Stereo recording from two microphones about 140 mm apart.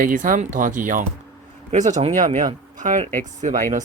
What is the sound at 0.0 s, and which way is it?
Speech, 75° right (ahead or behind).